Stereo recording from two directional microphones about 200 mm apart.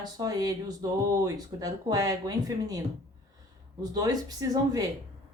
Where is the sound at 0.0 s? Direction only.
20° right (ahead or behind).